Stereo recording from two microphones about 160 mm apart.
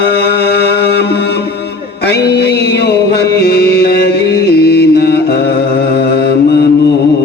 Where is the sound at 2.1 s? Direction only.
90° left.